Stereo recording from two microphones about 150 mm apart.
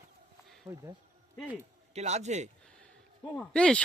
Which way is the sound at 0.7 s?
15° right (ahead or behind).